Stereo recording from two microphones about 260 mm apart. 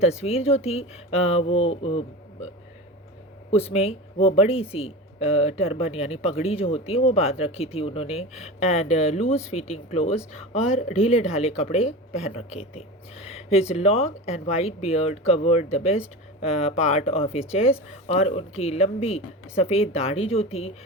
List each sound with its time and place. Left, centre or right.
0.0 s speech: left
3.5 s speech: left